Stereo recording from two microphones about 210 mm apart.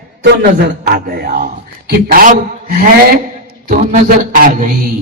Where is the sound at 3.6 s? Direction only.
40° right (ahead or behind).